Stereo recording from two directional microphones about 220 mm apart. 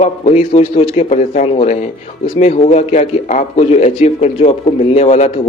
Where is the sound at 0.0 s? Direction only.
30° left (ahead or behind).